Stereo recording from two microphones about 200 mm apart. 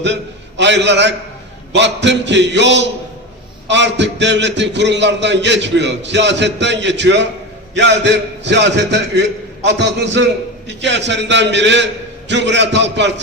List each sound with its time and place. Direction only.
0.0 s a man's voice: 60° right (ahead or behind)